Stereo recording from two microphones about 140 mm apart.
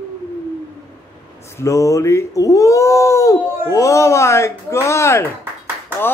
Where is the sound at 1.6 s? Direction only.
20° left (ahead or behind).